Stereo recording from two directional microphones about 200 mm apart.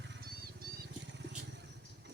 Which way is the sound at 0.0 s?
55° right (ahead or behind).